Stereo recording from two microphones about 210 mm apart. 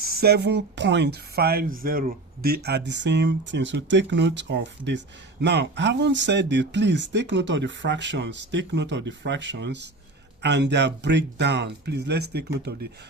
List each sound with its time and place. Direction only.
0.0 s speech: 45° right (ahead or behind)